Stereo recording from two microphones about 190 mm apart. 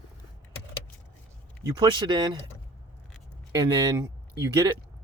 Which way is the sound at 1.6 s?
20° right (ahead or behind).